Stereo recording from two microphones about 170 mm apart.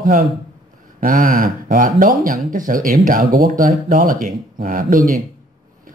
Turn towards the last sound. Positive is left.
turn(degrees=-55)  # may be behind; listen again after turning